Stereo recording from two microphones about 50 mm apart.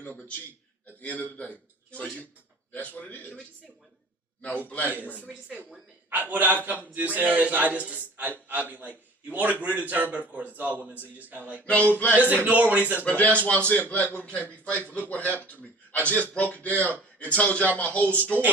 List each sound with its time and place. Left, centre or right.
1.0 s a man's voice: left
5.0 s speech: left
6.1 s a man's voice: right
11.6 s speech: left
12.1 s a man's voice: right
13.1 s a man's voice: left